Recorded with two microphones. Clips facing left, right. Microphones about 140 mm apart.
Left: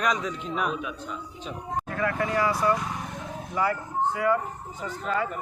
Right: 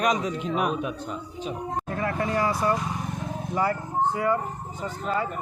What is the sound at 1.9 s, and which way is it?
Speech, 30° right (ahead or behind).